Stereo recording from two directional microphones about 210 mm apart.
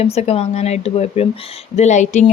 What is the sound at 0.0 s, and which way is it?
Speech, 30° left (ahead or behind).